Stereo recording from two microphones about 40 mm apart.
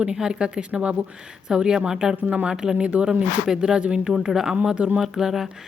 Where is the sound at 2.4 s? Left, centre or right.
Centre.